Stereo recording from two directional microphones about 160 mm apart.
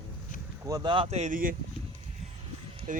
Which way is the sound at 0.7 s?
30° right (ahead or behind).